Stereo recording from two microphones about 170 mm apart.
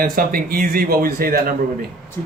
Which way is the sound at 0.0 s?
60° right (ahead or behind).